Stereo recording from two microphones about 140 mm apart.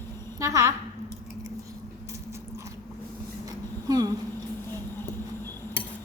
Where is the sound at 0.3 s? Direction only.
25° right (ahead or behind).